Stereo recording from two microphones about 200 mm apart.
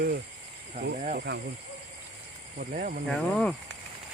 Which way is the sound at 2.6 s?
40° right (ahead or behind).